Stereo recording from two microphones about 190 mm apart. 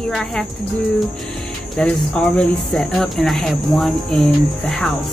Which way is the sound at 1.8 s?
5° left (ahead or behind).